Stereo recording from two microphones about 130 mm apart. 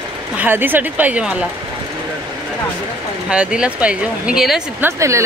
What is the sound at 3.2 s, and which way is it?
Speech, 10° right (ahead or behind).